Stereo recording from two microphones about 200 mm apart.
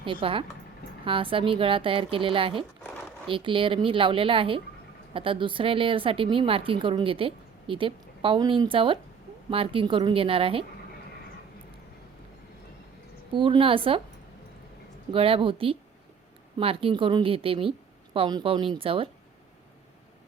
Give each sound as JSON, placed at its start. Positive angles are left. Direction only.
{"t": 0.0, "sound": "speech", "side_deg": -25}
{"t": 13.3, "sound": "speech", "side_deg": -25}
{"t": 15.1, "sound": "speech", "side_deg": -25}